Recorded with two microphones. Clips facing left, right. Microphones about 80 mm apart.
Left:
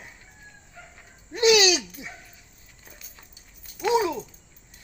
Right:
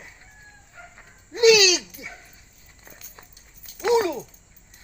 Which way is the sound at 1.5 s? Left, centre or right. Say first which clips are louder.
Right 1 dB; left.